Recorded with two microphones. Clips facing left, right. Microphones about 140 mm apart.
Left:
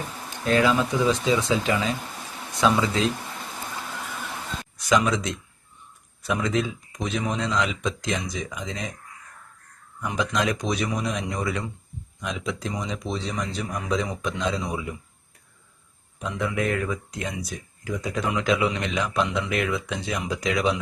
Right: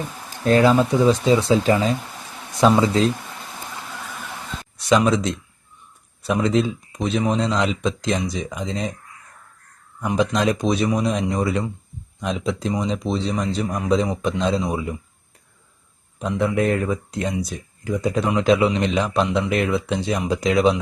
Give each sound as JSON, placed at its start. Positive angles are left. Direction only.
{"t": 0.4, "sound": "speech", "side_deg": -40}
{"t": 4.9, "sound": "speech", "side_deg": -30}
{"t": 10.2, "sound": "speech", "side_deg": -35}
{"t": 16.1, "sound": "speech", "side_deg": -35}